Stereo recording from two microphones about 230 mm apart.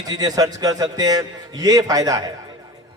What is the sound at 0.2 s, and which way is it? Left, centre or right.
A man's voice, centre.